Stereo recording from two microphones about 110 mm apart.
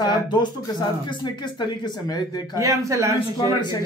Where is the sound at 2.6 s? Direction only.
30° right (ahead or behind).